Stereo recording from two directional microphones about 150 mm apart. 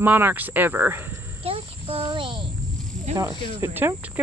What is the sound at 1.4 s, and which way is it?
Insect, 40° right (ahead or behind).